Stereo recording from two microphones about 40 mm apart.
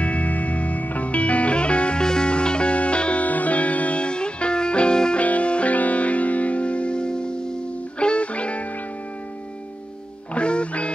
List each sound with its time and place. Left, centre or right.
0.0 s music: left
3.3 s music: left
5.2 s music: left
10.3 s music: left